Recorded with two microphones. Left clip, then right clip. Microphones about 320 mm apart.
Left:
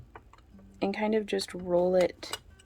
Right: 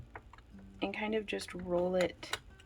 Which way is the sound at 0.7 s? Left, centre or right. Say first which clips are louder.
Left 7 dB; centre.